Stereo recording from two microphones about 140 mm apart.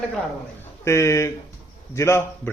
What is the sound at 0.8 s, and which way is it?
A man's voice, 20° left (ahead or behind).